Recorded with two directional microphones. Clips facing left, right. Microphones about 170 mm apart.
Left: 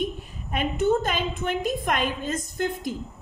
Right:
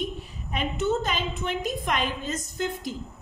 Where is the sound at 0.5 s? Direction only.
50° left (ahead or behind).